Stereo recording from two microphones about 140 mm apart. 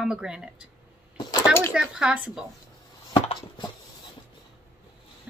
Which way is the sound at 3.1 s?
35° left (ahead or behind).